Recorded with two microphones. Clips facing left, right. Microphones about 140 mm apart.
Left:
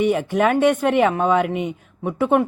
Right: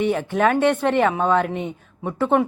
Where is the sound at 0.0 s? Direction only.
10° left (ahead or behind).